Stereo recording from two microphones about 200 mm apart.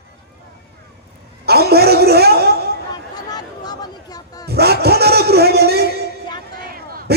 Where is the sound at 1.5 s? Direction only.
55° right (ahead or behind).